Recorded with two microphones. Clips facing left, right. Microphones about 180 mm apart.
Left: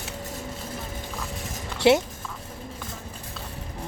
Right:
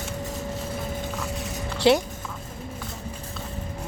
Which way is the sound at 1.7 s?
20° left (ahead or behind).